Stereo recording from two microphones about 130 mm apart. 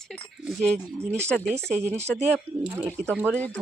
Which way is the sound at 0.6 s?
60° right (ahead or behind).